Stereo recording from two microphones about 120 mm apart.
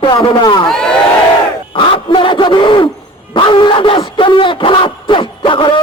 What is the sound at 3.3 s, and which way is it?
Music, 45° left (ahead or behind).